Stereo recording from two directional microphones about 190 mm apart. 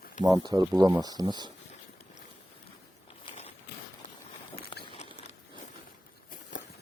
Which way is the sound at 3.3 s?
35° left (ahead or behind).